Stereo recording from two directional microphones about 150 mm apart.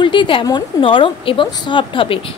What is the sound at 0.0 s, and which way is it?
A woman's voice, 35° left (ahead or behind).